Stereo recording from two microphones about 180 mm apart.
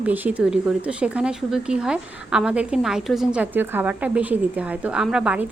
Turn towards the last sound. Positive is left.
turn(degrees=-5)  # may be behind; listen again after turning